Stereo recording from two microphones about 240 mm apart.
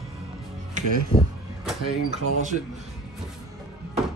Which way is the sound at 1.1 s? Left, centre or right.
Left.